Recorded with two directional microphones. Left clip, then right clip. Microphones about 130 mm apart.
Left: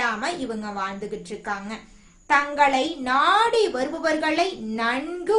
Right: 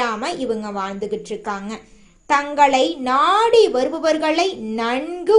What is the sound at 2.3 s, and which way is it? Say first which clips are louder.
A child's voice: right 4 dB; 40° right (ahead or behind).